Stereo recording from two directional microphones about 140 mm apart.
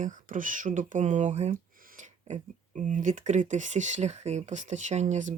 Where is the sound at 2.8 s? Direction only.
65° right (ahead or behind).